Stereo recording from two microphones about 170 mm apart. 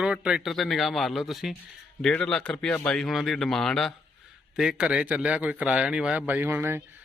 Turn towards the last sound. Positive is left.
turn(degrees=-10)  # may be behind; listen again after turning